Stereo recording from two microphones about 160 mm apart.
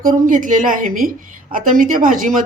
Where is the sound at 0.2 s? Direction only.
55° right (ahead or behind).